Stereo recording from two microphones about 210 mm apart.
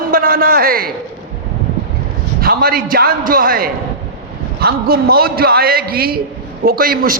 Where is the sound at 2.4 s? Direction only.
45° right (ahead or behind).